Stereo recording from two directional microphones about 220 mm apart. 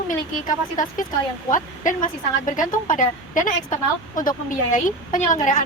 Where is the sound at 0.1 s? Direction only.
35° left (ahead or behind).